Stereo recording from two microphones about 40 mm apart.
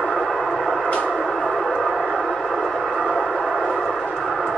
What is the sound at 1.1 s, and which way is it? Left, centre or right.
Music, centre.